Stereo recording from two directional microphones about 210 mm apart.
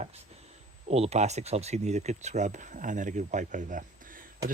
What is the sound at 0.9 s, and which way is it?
Speech, 30° right (ahead or behind).